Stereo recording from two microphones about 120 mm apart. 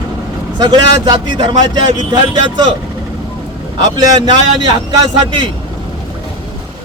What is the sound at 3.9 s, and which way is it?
Speech, 35° right (ahead or behind).